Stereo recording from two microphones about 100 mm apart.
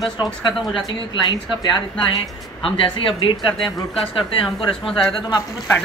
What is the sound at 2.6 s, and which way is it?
Speech, 55° left (ahead or behind).